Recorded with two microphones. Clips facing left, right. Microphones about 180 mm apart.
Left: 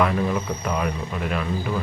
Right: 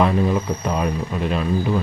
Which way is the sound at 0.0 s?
25° right (ahead or behind).